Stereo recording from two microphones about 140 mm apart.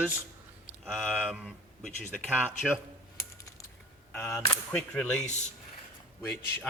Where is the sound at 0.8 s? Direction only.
Centre (ahead or behind).